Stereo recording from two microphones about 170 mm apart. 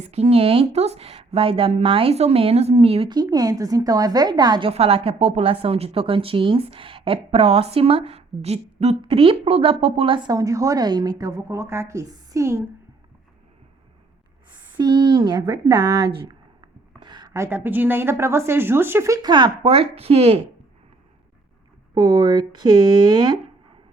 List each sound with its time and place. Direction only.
0.0 s a woman's voice: 40° right (ahead or behind)
4.7 s a woman's voice: 35° right (ahead or behind); by 12.6 s 15° right (ahead or behind)
14.8 s a woman's voice: 25° right (ahead or behind)
21.9 s speech: 25° right (ahead or behind)